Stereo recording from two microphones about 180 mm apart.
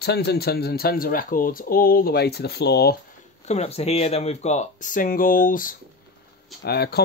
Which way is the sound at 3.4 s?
35° left (ahead or behind).